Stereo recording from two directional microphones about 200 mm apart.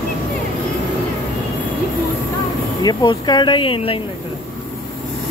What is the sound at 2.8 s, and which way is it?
Speech, 20° left (ahead or behind).